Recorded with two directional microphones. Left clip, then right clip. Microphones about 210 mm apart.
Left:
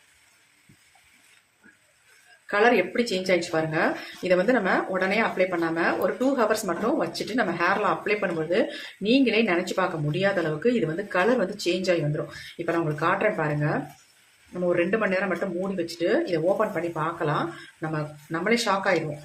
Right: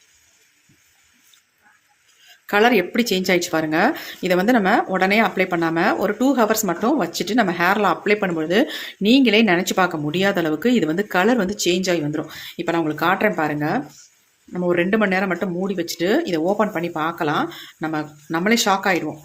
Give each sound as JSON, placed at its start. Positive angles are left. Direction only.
{"t": 2.5, "sound": "speech", "side_deg": -45}